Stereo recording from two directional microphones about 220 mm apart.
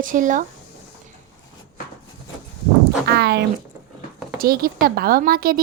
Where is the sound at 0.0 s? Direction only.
35° right (ahead or behind).